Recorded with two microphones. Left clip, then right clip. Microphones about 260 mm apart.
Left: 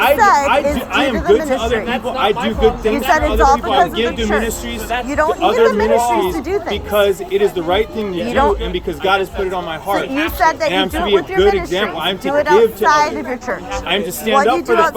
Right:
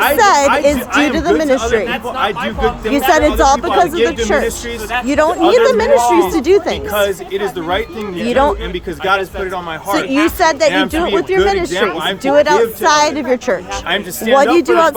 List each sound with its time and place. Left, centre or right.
0.0 s speech: right
1.9 s speech: centre